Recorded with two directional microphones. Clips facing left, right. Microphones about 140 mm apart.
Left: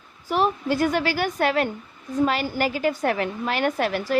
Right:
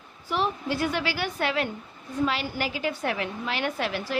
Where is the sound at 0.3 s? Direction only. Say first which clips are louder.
Left 5 dB; 45° left (ahead or behind).